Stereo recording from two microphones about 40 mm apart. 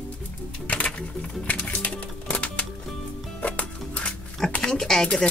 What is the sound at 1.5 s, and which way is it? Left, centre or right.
Music, left.